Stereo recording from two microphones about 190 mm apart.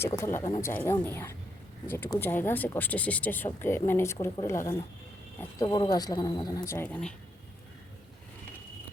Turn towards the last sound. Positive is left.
turn(degrees=10)  # may be behind; listen again after turning